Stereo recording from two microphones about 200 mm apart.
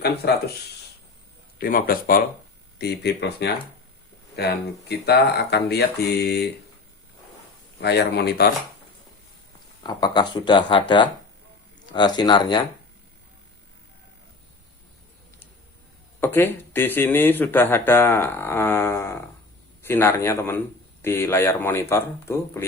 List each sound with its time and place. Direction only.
1.5 s speech: 45° left (ahead or behind)
7.8 s speech: 55° left (ahead or behind)
9.8 s speech: 20° left (ahead or behind)
16.2 s speech: 10° left (ahead or behind)